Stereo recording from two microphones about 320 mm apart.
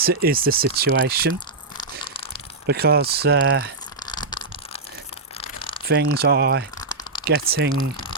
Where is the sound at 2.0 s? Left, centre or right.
Centre.